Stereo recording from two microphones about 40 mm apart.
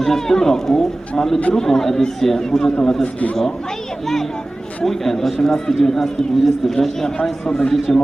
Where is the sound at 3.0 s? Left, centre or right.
Left.